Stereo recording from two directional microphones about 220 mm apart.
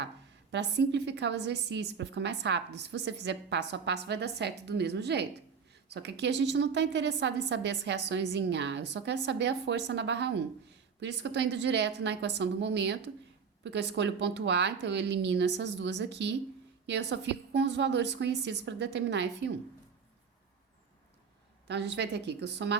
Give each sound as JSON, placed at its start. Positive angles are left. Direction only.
{"t": 0.5, "sound": "a woman's voice", "side_deg": -50}
{"t": 21.7, "sound": "a woman's voice", "side_deg": -50}